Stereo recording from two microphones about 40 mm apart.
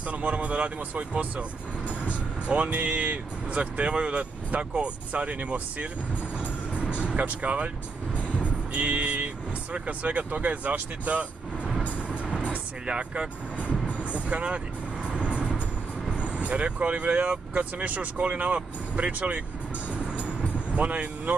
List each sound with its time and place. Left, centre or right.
0.0 s speech: right
2.4 s speech: right
6.7 s music: right
8.5 s speech: right
12.1 s vehicle: right
15.0 s music: right
16.1 s speech: right
19.9 s music: right